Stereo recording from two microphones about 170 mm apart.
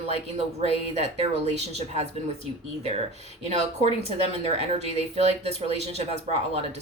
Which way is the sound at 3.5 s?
40° right (ahead or behind).